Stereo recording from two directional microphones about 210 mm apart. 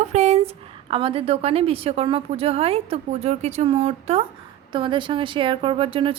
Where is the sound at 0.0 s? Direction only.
30° right (ahead or behind).